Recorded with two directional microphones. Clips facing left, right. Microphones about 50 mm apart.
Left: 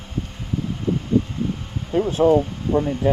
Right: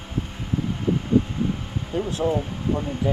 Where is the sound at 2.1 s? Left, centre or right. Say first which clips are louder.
Left 9 dB; left.